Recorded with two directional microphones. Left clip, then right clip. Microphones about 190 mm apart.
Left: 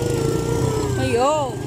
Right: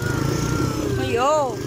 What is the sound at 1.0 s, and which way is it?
Vehicle, 25° left (ahead or behind).